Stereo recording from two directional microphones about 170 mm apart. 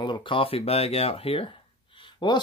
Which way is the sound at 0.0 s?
30° left (ahead or behind).